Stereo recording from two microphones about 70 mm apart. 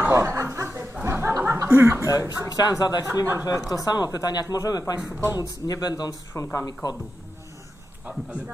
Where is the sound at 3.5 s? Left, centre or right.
Left.